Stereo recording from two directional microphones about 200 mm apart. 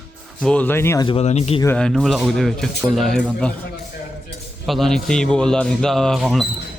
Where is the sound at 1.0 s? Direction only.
30° left (ahead or behind).